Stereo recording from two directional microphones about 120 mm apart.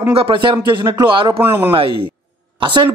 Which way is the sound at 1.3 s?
20° right (ahead or behind).